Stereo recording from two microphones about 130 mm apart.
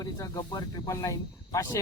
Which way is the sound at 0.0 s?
30° left (ahead or behind).